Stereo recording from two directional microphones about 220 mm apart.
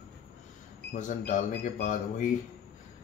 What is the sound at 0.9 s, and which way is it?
Speech, 35° left (ahead or behind).